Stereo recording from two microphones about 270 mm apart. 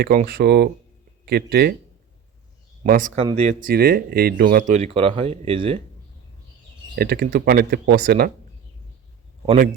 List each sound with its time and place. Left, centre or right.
0.0 s speech: right
2.8 s speech: right
6.9 s speech: right